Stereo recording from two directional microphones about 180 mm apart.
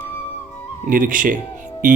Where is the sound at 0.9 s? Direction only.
50° right (ahead or behind).